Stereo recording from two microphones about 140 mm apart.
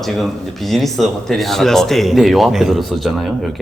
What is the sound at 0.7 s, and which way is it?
A man's voice, centre (ahead or behind).